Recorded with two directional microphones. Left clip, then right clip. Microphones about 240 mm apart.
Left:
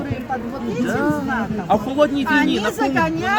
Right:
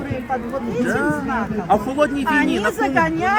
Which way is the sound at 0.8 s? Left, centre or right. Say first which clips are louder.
Left 1 dB; centre.